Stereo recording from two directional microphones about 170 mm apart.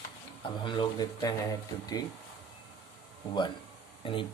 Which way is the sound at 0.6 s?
25° left (ahead or behind).